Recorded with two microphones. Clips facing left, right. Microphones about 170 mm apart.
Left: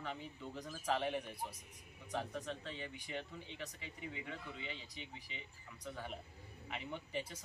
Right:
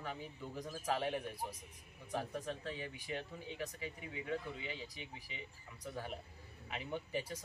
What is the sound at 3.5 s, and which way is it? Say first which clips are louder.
Speech: right 8 dB; 45° right (ahead or behind).